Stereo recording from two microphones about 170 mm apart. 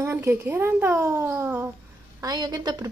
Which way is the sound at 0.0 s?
15° right (ahead or behind).